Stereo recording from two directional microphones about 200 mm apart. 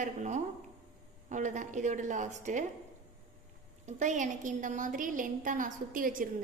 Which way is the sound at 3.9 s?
35° right (ahead or behind).